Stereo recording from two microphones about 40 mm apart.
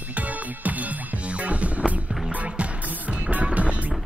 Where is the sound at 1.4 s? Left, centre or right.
Right.